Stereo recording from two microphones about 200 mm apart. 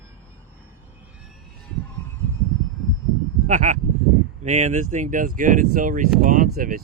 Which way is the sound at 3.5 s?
40° right (ahead or behind).